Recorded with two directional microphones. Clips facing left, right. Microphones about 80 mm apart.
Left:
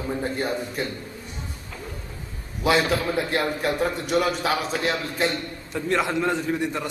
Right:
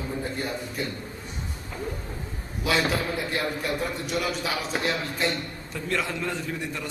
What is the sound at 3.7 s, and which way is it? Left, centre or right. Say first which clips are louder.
Speech: left 5 dB; left.